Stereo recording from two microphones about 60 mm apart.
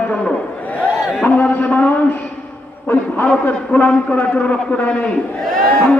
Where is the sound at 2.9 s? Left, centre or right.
Left.